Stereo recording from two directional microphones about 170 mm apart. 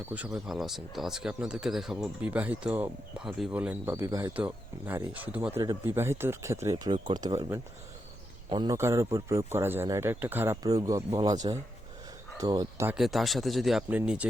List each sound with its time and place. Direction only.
0.4 s speech: centre (ahead or behind); by 12.8 s 20° right (ahead or behind)
12.8 s speech: 5° right (ahead or behind)